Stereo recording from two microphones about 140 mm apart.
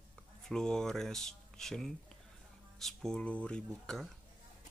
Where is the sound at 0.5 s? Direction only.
5° left (ahead or behind).